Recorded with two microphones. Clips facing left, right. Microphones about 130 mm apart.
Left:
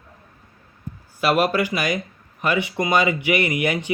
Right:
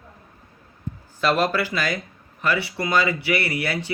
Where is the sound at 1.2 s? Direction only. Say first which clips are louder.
Left 2 dB; 10° left (ahead or behind).